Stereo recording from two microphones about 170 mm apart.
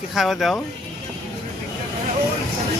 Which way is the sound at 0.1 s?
Centre (ahead or behind).